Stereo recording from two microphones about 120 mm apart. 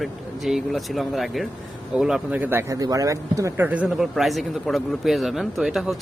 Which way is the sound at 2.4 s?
15° right (ahead or behind).